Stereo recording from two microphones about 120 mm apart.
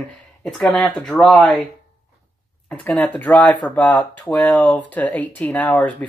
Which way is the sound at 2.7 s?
10° left (ahead or behind).